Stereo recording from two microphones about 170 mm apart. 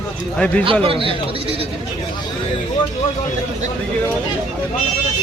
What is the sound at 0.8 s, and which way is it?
Speech, 30° right (ahead or behind).